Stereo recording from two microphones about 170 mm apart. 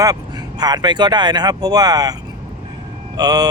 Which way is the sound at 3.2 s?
20° right (ahead or behind).